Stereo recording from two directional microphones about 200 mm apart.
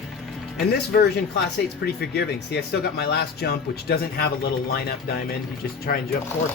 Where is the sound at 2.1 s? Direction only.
55° left (ahead or behind).